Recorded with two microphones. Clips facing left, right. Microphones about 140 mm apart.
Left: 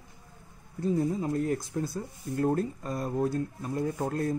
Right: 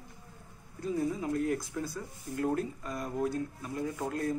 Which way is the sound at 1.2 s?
35° left (ahead or behind).